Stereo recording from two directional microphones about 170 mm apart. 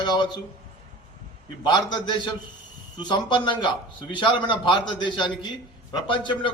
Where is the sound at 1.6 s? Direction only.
25° left (ahead or behind).